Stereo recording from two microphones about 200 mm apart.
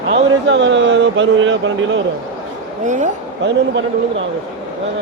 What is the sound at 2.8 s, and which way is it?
Speech, 35° right (ahead or behind).